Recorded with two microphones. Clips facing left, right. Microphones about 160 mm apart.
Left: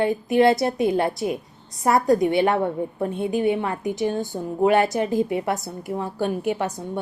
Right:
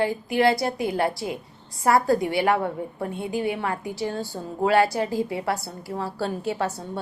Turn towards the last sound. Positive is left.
turn(degrees=15)  # may be behind; listen again after turning